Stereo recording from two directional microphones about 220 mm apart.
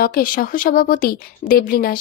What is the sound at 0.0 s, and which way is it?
A woman's voice, 40° left (ahead or behind).